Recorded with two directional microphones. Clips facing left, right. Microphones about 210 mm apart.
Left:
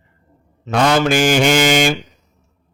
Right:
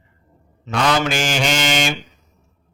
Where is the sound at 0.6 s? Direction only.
45° left (ahead or behind).